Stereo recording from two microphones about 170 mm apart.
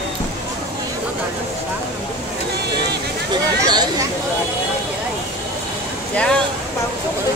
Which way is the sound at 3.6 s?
25° right (ahead or behind).